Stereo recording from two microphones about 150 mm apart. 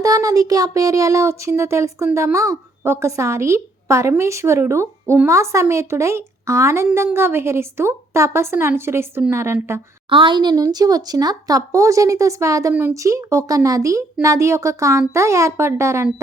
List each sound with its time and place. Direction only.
0.0 s a woman's voice: 25° right (ahead or behind)
10.1 s speech: 35° right (ahead or behind); by 16.0 s 20° right (ahead or behind)